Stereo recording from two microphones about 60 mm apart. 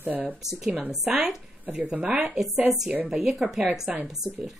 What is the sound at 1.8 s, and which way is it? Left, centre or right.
Speech, right.